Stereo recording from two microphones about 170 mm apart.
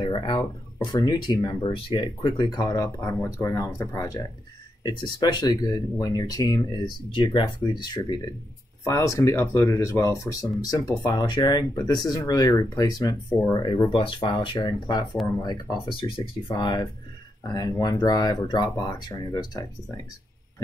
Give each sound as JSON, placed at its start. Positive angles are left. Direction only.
{"t": 0.0, "sound": "guitar", "side_deg": 30}
{"t": 0.9, "sound": "speech", "side_deg": 25}